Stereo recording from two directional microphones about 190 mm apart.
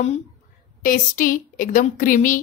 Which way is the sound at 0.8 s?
45° left (ahead or behind).